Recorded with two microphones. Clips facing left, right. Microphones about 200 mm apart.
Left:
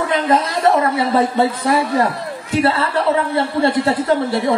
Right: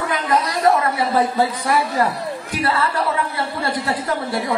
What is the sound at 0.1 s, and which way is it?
A man's voice, 25° left (ahead or behind).